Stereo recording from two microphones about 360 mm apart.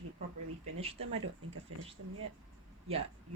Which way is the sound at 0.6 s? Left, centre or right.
Centre.